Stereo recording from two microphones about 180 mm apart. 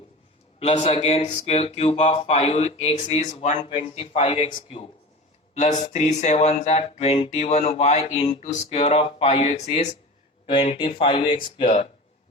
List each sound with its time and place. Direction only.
0.6 s speech: 35° left (ahead or behind)
3.6 s speech: 30° left (ahead or behind)
5.5 s speech: 40° left (ahead or behind)